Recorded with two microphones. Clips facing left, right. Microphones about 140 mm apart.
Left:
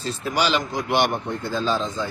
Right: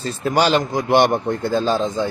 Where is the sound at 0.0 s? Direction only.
45° right (ahead or behind).